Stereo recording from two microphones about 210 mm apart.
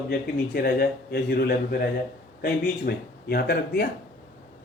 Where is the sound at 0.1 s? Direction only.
45° left (ahead or behind).